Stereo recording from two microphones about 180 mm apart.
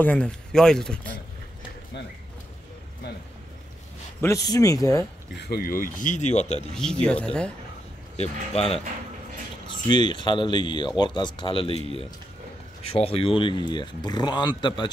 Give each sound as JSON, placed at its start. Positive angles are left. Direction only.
{"t": 0.0, "sound": "speech", "side_deg": 5}
{"t": 4.2, "sound": "speech", "side_deg": 20}
{"t": 5.4, "sound": "speech", "side_deg": 55}
{"t": 6.7, "sound": "speech", "side_deg": 5}
{"t": 8.2, "sound": "speech", "side_deg": 35}
{"t": 9.8, "sound": "speech", "side_deg": 25}
{"t": 12.9, "sound": "speech", "side_deg": 30}